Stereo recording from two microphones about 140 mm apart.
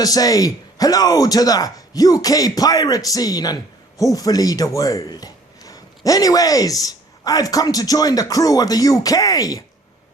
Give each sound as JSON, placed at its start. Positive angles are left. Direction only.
{"t": 0.0, "sound": "speech", "side_deg": 25}